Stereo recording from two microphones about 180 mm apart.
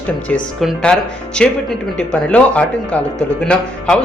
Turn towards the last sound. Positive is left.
turn(degrees=5)  # may be behind; listen again after turning